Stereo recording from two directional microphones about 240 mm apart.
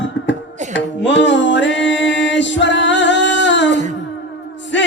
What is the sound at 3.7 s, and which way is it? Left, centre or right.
Music, right.